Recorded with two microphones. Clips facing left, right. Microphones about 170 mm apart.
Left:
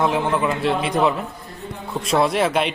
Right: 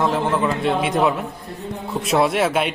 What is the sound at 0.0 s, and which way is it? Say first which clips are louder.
Speech: even; 5° left (ahead or behind).